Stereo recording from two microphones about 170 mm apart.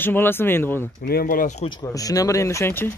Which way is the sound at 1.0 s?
65° left (ahead or behind).